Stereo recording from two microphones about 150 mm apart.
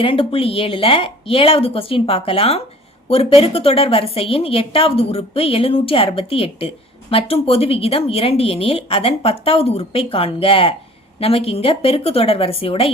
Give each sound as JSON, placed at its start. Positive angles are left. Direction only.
{"t": 0.0, "sound": "a woman's voice", "side_deg": 35}